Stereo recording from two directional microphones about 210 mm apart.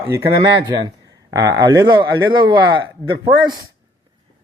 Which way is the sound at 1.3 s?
20° right (ahead or behind).